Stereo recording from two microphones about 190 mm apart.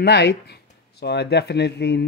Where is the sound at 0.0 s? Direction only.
65° left (ahead or behind).